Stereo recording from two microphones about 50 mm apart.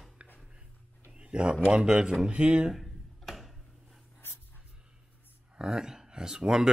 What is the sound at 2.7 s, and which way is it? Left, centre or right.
Tick-tock, centre.